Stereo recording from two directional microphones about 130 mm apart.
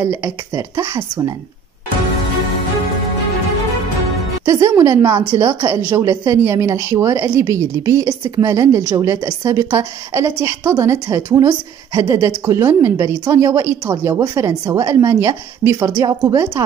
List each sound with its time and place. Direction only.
0.0 s a woman's voice: 20° right (ahead or behind)
4.5 s a woman's voice: 25° right (ahead or behind)